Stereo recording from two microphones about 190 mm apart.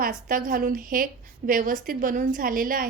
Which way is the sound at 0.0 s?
45° right (ahead or behind).